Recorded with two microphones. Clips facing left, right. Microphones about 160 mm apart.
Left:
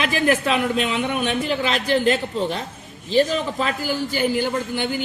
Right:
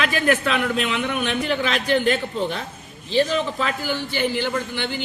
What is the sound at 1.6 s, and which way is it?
Speech, 35° left (ahead or behind).